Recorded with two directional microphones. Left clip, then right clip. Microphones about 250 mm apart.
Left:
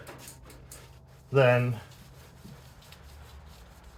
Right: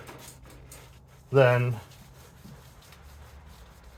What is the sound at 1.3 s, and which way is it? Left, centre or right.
Speech, right.